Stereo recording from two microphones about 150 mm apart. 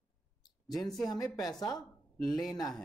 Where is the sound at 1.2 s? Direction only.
25° left (ahead or behind).